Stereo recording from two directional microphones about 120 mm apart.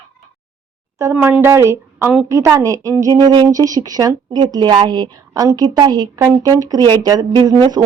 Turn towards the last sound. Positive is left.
turn(degrees=-25)  # may be behind; listen again after turning